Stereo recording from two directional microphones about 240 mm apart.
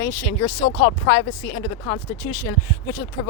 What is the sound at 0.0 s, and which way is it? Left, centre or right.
Speech, centre.